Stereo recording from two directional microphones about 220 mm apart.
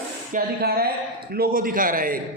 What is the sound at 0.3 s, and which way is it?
A woman's voice, 45° right (ahead or behind).